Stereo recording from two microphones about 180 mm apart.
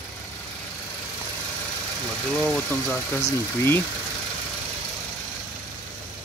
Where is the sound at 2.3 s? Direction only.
5° left (ahead or behind).